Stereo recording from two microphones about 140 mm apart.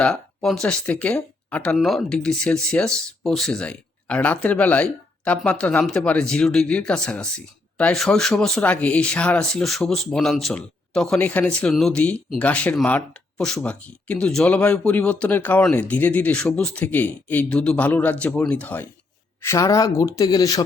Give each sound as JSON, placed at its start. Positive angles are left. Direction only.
{"t": 0.0, "sound": "speech", "side_deg": 5}
{"t": 19.4, "sound": "speech", "side_deg": 20}